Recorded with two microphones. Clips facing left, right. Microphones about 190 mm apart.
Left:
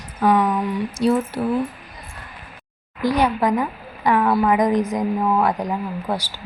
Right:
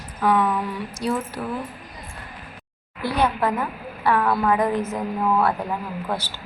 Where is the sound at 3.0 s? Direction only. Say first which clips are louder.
Left 3 dB; 15° left (ahead or behind).